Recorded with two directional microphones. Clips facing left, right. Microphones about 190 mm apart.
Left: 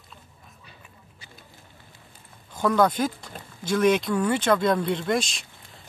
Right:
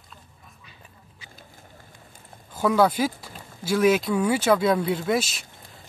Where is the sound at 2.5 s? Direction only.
5° right (ahead or behind).